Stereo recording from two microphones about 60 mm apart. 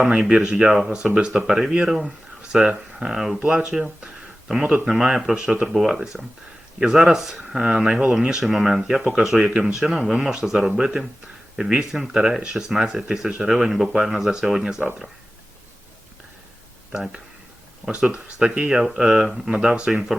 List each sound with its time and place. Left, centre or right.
0.0 s speech: centre
4.0 s a sound: centre
4.9 s speech: centre
5.7 s speech: centre
9.5 s speech: centre
9.9 s speech: centre
16.9 s speech: centre
19.5 s speech: centre